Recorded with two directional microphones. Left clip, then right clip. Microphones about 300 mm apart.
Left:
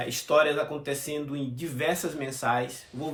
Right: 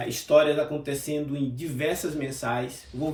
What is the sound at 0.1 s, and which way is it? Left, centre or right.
Speech, centre.